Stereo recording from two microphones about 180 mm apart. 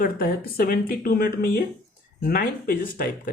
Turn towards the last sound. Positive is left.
turn(degrees=50)  # may be behind; listen again after turning